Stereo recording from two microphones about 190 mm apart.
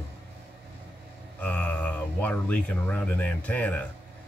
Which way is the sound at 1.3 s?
10° left (ahead or behind).